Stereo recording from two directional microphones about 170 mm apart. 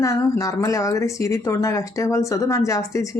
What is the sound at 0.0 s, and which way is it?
Speech, 20° left (ahead or behind).